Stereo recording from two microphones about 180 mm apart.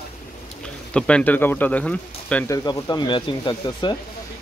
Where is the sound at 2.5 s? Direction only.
20° left (ahead or behind).